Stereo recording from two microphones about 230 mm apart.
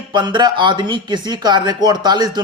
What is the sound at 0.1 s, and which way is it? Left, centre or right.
Speech, centre.